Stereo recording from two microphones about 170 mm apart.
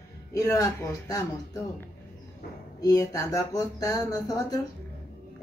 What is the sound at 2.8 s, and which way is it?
Speech, 20° left (ahead or behind).